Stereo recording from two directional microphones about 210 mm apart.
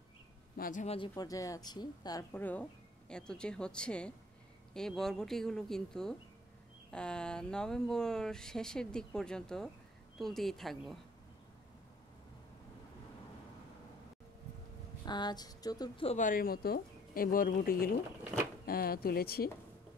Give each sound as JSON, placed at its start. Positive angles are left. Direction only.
{"t": 0.6, "sound": "speech", "side_deg": 40}
{"t": 0.9, "sound": "speech", "side_deg": 20}
{"t": 15.0, "sound": "speech", "side_deg": 20}